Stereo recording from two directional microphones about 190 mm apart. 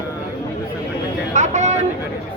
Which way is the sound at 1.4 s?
40° right (ahead or behind).